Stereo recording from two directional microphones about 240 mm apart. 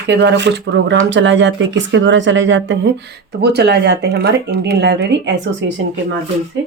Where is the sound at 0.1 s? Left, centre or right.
Right.